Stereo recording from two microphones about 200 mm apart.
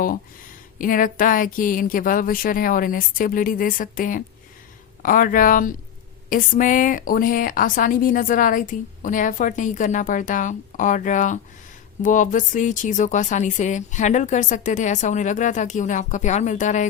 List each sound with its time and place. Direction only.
0.8 s a woman's voice: 45° left (ahead or behind)